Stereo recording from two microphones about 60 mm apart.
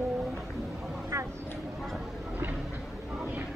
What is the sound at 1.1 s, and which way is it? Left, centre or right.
Vehicle, right.